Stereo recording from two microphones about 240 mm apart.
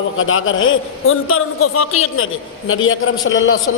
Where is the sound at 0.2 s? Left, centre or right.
Left.